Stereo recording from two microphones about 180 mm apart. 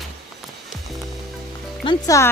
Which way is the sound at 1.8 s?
20° left (ahead or behind).